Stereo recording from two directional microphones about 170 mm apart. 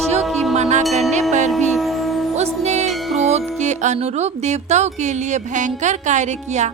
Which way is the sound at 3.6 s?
45° right (ahead or behind).